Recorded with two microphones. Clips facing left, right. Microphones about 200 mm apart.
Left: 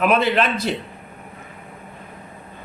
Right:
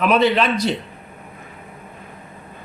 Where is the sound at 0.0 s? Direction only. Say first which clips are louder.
Right 2 dB; 50° left (ahead or behind).